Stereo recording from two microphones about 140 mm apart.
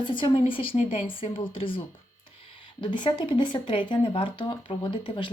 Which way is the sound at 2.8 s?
35° left (ahead or behind).